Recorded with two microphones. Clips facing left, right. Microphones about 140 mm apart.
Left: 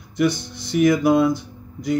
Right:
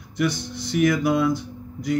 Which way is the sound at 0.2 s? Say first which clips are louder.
Left 4 dB; 25° left (ahead or behind).